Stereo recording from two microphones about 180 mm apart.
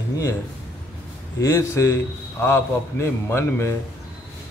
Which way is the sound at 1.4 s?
15° left (ahead or behind).